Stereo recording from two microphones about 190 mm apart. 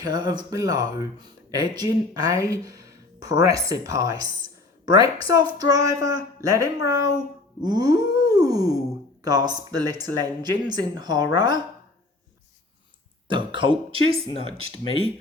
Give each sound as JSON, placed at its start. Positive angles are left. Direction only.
{"t": 0.0, "sound": "speech", "side_deg": -20}
{"t": 5.3, "sound": "speech", "side_deg": -20}
{"t": 13.2, "sound": "speech", "side_deg": -25}